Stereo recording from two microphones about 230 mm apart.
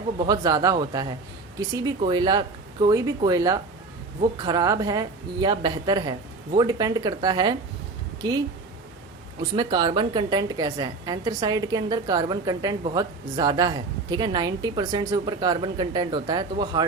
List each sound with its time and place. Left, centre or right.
0.2 s a woman's voice: centre
9.4 s a woman's voice: centre